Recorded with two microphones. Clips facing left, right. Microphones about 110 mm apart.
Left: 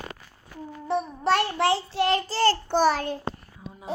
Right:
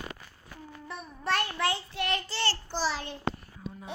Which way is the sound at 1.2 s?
30° left (ahead or behind).